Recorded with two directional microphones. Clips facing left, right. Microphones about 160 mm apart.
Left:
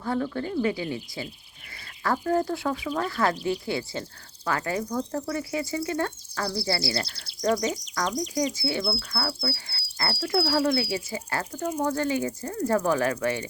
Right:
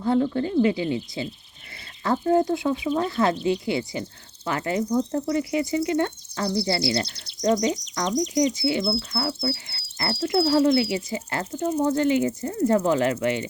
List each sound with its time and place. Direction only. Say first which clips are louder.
0.0 s speech: right 6 dB; 25° right (ahead or behind)